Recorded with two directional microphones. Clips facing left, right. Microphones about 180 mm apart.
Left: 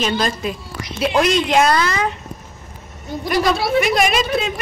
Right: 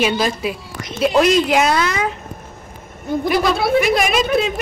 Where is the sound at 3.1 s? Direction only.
55° right (ahead or behind).